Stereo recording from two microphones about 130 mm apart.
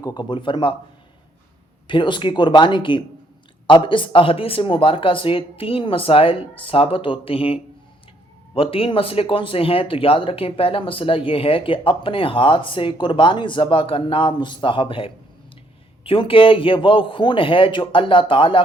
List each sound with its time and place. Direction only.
0.0 s a man's voice: 35° left (ahead or behind)
1.9 s a man's voice: 40° left (ahead or behind)